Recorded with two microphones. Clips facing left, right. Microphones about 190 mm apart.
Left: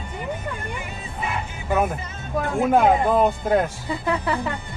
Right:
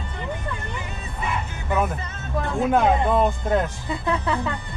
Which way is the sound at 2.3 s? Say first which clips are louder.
Left 2 dB; 10° left (ahead or behind).